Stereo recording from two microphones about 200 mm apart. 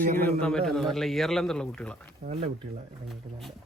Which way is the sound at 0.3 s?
5° left (ahead or behind).